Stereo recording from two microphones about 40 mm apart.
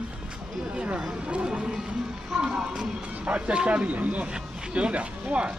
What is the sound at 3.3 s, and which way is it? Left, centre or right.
Speech, right.